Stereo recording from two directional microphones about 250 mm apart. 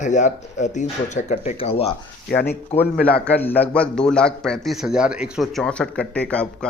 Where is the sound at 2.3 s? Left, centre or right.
Left.